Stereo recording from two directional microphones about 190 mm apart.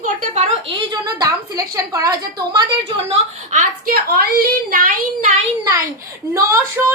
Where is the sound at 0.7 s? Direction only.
25° right (ahead or behind).